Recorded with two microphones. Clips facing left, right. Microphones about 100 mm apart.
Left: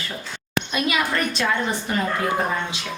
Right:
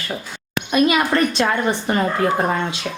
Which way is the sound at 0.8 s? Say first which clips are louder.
Right 6 dB; 45° right (ahead or behind).